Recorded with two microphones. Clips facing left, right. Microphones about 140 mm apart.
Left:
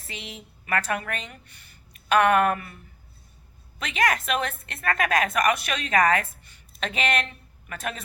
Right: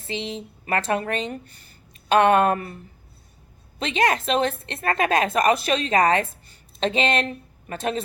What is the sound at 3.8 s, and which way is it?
A woman's voice, 25° right (ahead or behind).